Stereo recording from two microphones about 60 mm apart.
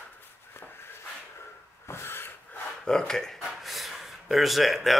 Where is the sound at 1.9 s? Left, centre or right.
Left.